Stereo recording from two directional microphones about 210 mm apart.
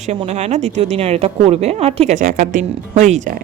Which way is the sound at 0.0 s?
30° right (ahead or behind).